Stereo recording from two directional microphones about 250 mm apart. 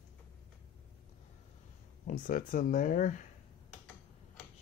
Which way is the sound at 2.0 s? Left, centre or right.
Left.